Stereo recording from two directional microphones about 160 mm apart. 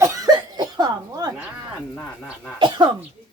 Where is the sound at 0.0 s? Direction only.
20° right (ahead or behind).